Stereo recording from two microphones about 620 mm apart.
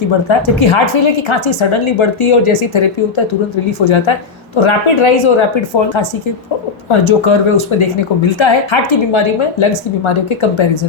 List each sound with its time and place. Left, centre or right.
0.3 s speech: left